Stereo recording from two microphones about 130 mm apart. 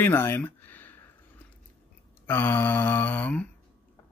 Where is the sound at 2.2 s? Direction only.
15° left (ahead or behind).